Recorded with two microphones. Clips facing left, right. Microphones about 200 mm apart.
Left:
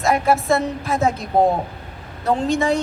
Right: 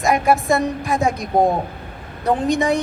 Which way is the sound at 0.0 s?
15° right (ahead or behind).